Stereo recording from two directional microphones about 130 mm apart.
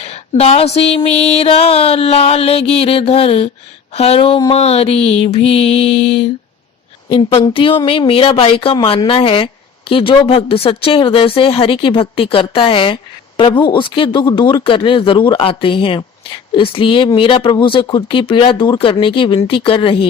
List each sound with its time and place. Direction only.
0.0 s speech: 50° left (ahead or behind)